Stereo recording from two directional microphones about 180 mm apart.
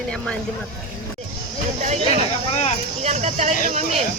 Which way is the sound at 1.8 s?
40° right (ahead or behind).